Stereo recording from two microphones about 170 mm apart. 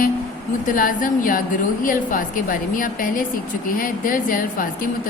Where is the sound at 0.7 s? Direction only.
50° left (ahead or behind).